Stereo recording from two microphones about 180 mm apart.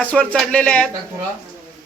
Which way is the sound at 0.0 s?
5° left (ahead or behind).